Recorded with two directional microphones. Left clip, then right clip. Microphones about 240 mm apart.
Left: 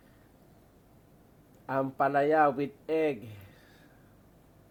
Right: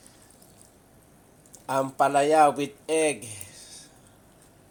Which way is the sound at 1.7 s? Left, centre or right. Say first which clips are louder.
Right 5 dB; centre.